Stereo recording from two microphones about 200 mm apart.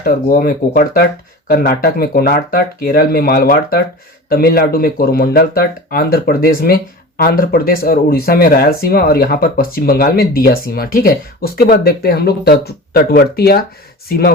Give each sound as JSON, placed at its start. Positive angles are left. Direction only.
{"t": 0.0, "sound": "speech", "side_deg": 45}